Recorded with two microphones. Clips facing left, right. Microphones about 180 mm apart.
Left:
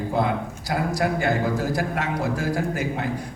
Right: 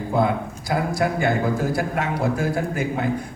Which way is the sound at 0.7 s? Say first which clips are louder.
Right 1 dB; 50° right (ahead or behind).